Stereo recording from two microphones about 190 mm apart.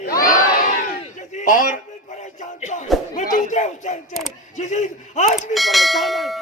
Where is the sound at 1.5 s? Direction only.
45° left (ahead or behind).